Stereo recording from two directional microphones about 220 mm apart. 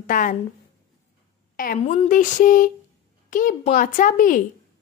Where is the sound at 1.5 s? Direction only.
40° left (ahead or behind).